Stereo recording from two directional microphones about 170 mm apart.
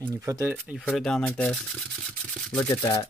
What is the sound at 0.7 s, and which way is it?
Speech, 5° left (ahead or behind).